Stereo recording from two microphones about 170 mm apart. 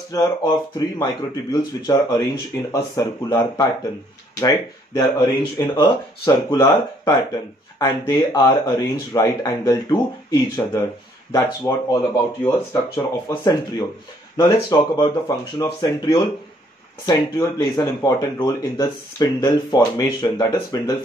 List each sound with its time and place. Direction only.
0.1 s speech: 25° left (ahead or behind)